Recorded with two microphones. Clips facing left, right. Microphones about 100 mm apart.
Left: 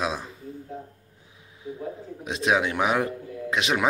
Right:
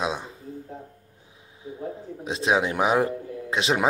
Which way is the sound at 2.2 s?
30° right (ahead or behind).